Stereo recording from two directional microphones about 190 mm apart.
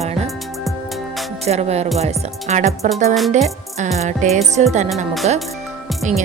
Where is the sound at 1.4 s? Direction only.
35° right (ahead or behind).